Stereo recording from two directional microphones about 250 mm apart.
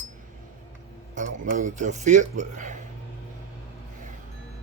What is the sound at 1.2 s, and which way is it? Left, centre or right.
Speech, right.